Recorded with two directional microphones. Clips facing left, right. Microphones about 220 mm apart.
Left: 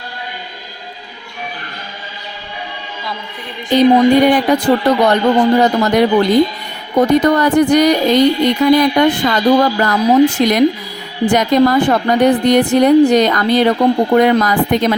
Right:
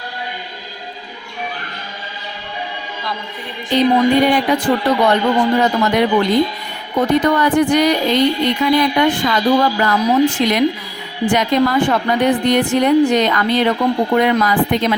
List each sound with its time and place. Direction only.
4.3 s a woman's voice: 45° left (ahead or behind)